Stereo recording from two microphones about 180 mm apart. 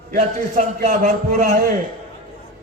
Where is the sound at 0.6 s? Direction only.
40° right (ahead or behind).